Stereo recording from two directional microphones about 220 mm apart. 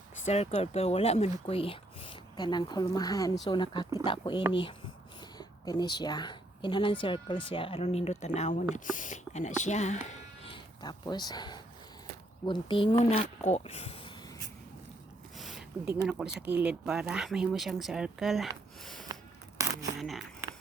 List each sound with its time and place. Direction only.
0.3 s speech: 30° left (ahead or behind)
10.4 s speech: 20° left (ahead or behind)
15.4 s a sound: centre (ahead or behind)
16.0 s speech: 5° right (ahead or behind)
19.6 s a sound: 15° right (ahead or behind)
20.0 s speech: centre (ahead or behind)